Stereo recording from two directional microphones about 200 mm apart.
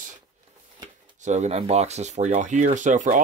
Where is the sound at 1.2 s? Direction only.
35° right (ahead or behind).